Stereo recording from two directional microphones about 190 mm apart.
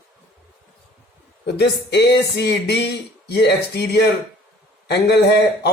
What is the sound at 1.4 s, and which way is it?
Speech, 60° left (ahead or behind).